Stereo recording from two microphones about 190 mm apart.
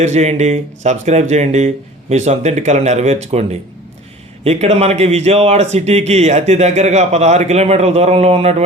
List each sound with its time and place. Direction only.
0.0 s speech: 35° right (ahead or behind)